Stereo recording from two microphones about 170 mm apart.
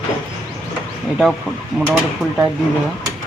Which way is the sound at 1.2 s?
Centre (ahead or behind).